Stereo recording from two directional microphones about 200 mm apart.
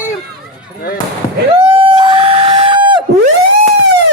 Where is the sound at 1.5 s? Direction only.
30° right (ahead or behind).